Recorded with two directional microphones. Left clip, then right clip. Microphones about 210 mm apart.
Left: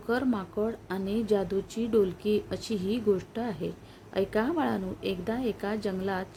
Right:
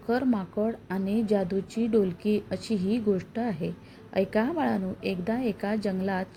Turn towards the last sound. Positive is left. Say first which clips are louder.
# right 2 dB
turn(degrees=0)  # may be behind; listen again after turning